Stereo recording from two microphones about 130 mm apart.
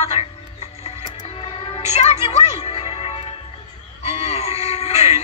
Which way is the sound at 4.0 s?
50° left (ahead or behind).